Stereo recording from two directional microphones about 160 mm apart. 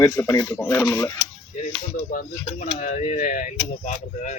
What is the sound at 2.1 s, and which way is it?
Speech, 50° left (ahead or behind).